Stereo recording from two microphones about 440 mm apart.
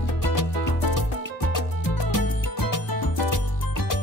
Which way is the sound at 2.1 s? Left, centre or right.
Left.